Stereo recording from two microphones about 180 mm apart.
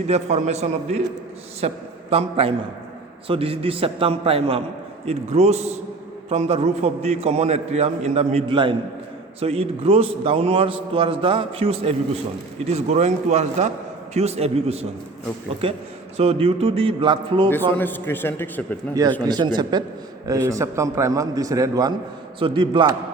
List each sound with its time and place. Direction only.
0.1 s a man's voice: 40° right (ahead or behind)
17.7 s a man's voice: 10° left (ahead or behind)
19.2 s a man's voice: 25° right (ahead or behind)